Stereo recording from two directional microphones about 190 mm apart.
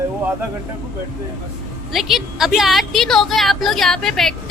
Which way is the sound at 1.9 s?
Centre (ahead or behind).